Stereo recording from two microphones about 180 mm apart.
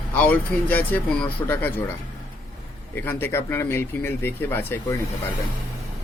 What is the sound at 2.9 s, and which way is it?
Speech, 10° left (ahead or behind).